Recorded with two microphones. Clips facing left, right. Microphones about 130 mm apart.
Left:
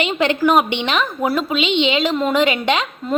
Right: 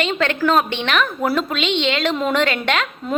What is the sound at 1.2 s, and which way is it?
Speech, 10° left (ahead or behind).